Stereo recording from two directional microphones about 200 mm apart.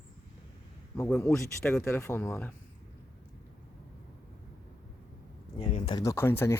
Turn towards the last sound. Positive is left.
turn(degrees=10)  # may be behind; listen again after turning